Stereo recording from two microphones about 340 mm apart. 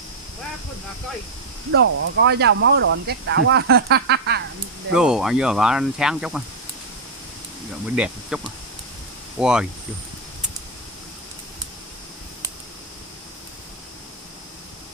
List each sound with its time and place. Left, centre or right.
1.7 s speech: right
4.9 s speech: centre
7.9 s speech: centre
9.4 s speech: centre